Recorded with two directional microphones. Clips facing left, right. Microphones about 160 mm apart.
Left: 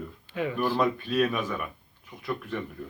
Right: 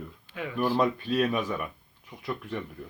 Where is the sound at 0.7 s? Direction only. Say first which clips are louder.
Even; 30° right (ahead or behind).